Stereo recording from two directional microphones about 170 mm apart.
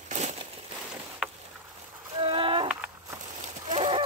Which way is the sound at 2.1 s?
30° right (ahead or behind).